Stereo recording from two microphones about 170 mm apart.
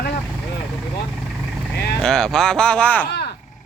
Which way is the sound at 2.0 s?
5° left (ahead or behind).